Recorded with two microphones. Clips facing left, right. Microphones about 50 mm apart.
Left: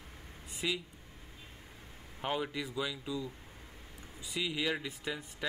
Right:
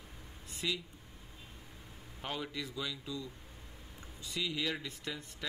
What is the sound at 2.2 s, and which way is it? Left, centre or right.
Speech, centre.